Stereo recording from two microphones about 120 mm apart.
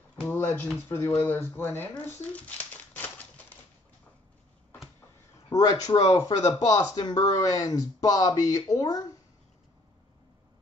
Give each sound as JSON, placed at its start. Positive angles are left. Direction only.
{"t": 0.2, "sound": "a sound", "side_deg": 15}
{"t": 0.8, "sound": "speech", "side_deg": 20}
{"t": 5.5, "sound": "speech", "side_deg": 30}